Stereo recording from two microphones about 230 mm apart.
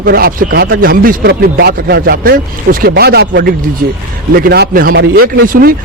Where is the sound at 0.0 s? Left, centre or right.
Right.